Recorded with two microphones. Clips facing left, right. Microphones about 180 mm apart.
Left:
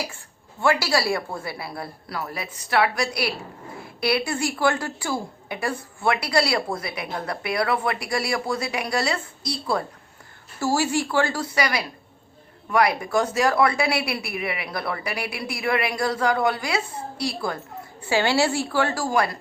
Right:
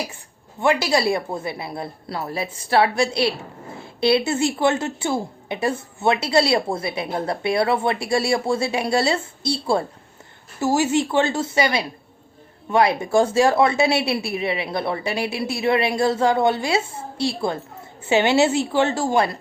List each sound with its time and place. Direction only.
0.6 s speech: 20° right (ahead or behind)